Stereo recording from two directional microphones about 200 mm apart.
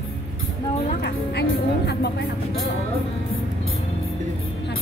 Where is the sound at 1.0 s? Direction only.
55° left (ahead or behind).